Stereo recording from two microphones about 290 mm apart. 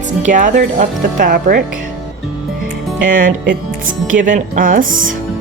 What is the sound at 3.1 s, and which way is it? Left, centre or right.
Speech, right.